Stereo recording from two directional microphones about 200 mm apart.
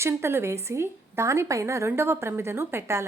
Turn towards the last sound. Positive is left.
turn(degrees=-15)  # may be behind; listen again after turning